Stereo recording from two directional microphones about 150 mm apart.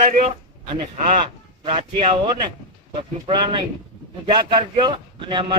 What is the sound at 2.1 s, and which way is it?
A man's voice, 35° right (ahead or behind).